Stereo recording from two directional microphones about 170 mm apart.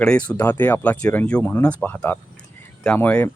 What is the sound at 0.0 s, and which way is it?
Speech, 5° left (ahead or behind).